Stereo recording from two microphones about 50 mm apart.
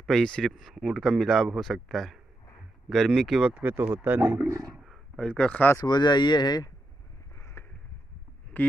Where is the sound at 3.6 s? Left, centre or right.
Right.